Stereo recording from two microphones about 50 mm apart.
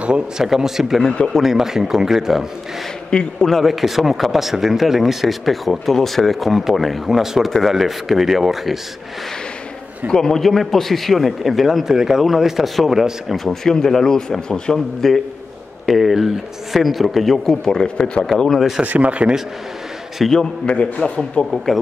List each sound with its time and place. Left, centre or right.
0.0 s a man's voice: centre
0.6 s speech: centre
3.1 s a man's voice: centre
3.6 s speech: centre
10.0 s speech: centre
17.6 s a man's voice: centre
18.8 s speech: right
20.2 s speech: centre
20.6 s a man's voice: centre